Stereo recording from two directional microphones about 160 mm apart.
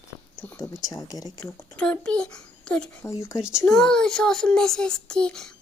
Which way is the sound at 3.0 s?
20° left (ahead or behind).